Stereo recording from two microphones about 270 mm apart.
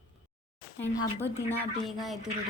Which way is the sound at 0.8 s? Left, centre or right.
Centre.